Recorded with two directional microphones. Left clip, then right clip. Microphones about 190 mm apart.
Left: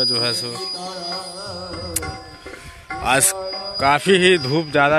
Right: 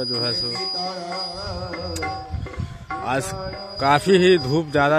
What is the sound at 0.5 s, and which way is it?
Music, 40° left (ahead or behind).